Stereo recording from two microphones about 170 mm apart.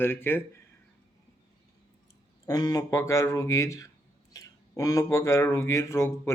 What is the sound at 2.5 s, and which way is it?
Speech, 20° left (ahead or behind).